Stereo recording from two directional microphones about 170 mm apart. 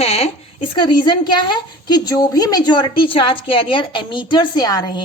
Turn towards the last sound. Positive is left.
turn(degrees=25)  # may be behind; listen again after turning